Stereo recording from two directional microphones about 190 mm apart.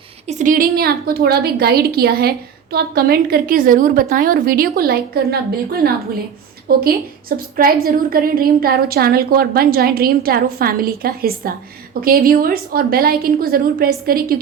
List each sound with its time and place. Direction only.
0.3 s a woman's voice: 40° right (ahead or behind)